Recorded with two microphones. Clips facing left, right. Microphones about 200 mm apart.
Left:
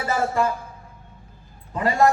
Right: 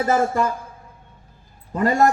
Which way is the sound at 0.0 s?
45° right (ahead or behind).